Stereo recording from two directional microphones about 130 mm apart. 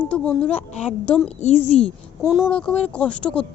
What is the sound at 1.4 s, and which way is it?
Speech, 55° left (ahead or behind).